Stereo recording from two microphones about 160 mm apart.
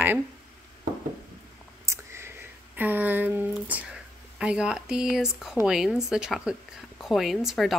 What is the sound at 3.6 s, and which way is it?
Speech, 10° right (ahead or behind).